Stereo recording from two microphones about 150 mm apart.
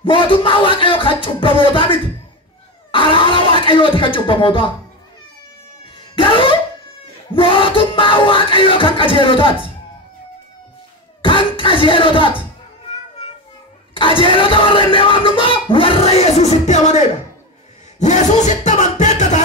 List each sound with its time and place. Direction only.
0.0 s music: 35° left (ahead or behind)
2.9 s speech: 35° left (ahead or behind)
5.9 s cat: 35° left (ahead or behind)
7.3 s music: 35° left (ahead or behind)
11.2 s speech: 35° left (ahead or behind)
13.9 s speech: 35° left (ahead or behind); by 17.1 s 50° left (ahead or behind)
17.9 s a sound: 50° left (ahead or behind)